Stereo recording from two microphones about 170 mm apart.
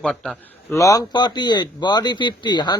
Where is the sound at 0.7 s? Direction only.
20° left (ahead or behind).